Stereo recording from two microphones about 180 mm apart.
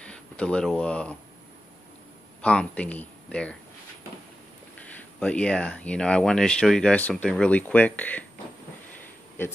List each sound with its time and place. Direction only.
0.0 s speech: 5° left (ahead or behind)
2.4 s speech: 5° left (ahead or behind)
4.7 s speech: 5° left (ahead or behind)